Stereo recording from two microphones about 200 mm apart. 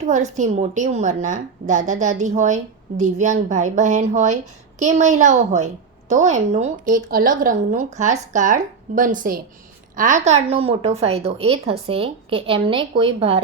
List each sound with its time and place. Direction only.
0.0 s a woman's voice: 35° right (ahead or behind)